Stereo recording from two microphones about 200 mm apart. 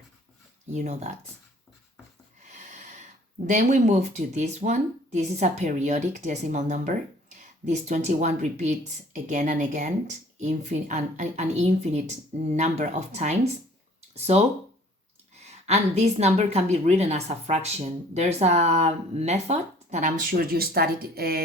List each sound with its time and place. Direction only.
0.7 s speech: 35° right (ahead or behind)
2.5 s a sound: 35° right (ahead or behind)
3.4 s speech: 35° right (ahead or behind)
15.4 s speech: 35° right (ahead or behind); by 21.4 s 50° right (ahead or behind)